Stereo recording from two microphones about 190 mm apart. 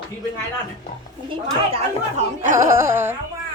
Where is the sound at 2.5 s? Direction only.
15° right (ahead or behind).